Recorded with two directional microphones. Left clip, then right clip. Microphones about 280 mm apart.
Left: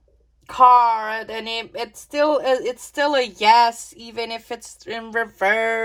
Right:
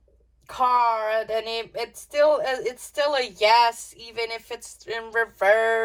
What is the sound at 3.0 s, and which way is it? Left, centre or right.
A woman's voice, left.